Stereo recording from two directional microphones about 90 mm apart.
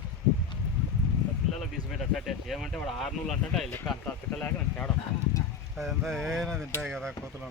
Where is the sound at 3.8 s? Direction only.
20° left (ahead or behind).